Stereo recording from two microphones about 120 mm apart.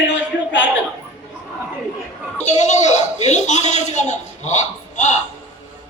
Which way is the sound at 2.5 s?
75° left (ahead or behind).